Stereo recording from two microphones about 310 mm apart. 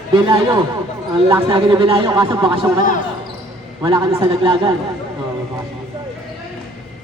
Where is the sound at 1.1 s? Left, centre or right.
Centre.